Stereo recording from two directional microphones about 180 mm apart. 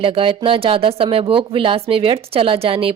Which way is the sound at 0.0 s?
30° right (ahead or behind).